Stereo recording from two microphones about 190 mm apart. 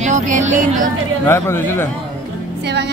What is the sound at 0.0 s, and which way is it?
Music, 40° right (ahead or behind).